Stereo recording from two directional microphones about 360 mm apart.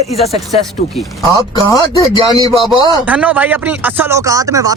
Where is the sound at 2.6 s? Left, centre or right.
Centre.